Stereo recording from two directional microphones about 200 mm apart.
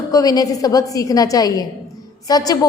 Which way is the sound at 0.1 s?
20° left (ahead or behind).